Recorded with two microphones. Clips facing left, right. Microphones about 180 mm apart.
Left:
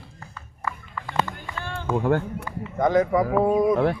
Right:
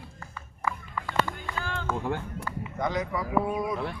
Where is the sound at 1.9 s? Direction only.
60° left (ahead or behind); by 3.8 s 45° left (ahead or behind).